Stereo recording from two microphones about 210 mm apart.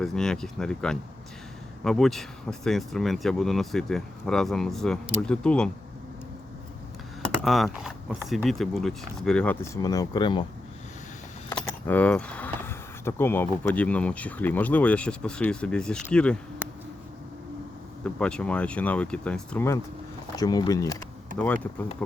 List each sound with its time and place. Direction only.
0.0 s speech: centre (ahead or behind)
7.3 s speech: centre (ahead or behind); by 10.4 s 20° left (ahead or behind)
11.5 s speech: 5° left (ahead or behind)
16.6 s a sound: 10° right (ahead or behind)
18.0 s speech: 5° left (ahead or behind)